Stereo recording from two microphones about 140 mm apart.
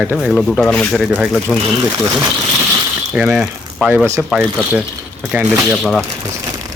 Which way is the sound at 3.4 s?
5° right (ahead or behind).